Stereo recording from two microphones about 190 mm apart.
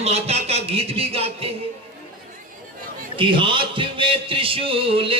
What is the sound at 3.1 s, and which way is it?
A man's voice, 25° right (ahead or behind).